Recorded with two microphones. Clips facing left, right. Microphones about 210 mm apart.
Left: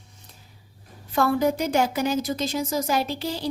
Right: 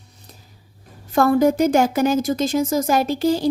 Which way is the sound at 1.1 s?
45° right (ahead or behind).